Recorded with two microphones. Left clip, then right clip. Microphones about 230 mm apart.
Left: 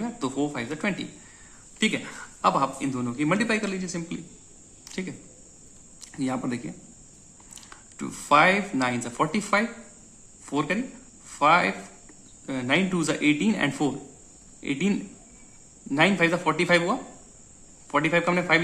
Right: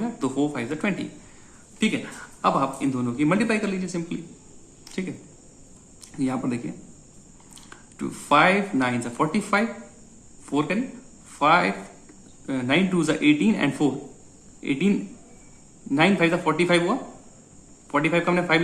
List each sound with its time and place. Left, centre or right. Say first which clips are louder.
0.0 s speech: right 3 dB; centre
2.4 s a man's voice: right 1 dB; centre
4.9 s cricket: right 2 dB; centre
6.0 s a man's voice: right 2 dB; centre